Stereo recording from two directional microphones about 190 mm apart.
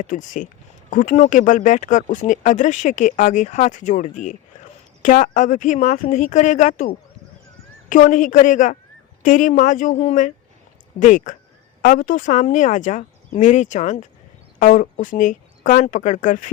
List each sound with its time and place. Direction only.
0.0 s speech: 40° left (ahead or behind)